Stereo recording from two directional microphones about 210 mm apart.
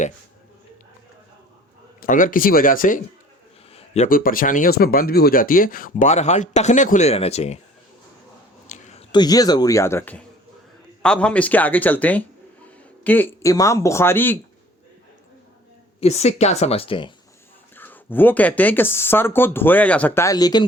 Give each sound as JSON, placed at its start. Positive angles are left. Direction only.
{"t": 2.0, "sound": "speech", "side_deg": 40}
{"t": 8.6, "sound": "a sound", "side_deg": 35}
{"t": 9.1, "sound": "speech", "side_deg": 20}
{"t": 16.0, "sound": "speech", "side_deg": 30}
{"t": 17.7, "sound": "speech", "side_deg": 10}